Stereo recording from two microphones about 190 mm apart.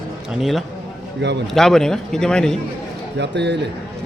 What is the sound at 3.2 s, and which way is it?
Speech, 65° right (ahead or behind).